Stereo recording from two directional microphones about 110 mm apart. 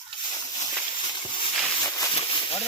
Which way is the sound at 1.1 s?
45° left (ahead or behind).